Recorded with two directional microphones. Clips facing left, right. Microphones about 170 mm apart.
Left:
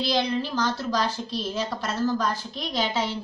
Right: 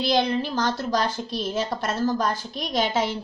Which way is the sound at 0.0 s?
50° right (ahead or behind).